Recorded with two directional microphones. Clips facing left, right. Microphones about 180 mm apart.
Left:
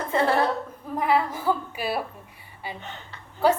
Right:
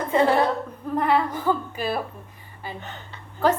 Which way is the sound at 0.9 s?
5° left (ahead or behind).